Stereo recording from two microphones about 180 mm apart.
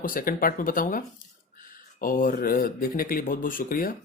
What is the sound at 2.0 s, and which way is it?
Speech, 50° left (ahead or behind).